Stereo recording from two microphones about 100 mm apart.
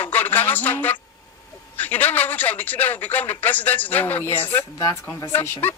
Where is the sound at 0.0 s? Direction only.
15° left (ahead or behind).